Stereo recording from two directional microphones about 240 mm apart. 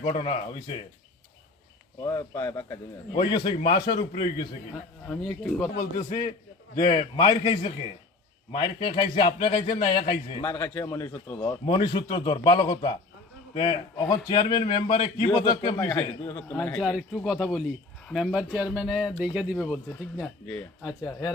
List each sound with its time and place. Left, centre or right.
0.0 s a man's voice: left
2.0 s a man's voice: centre
5.0 s speech: centre
6.0 s a man's voice: centre
10.5 s a man's voice: centre
16.3 s speech: centre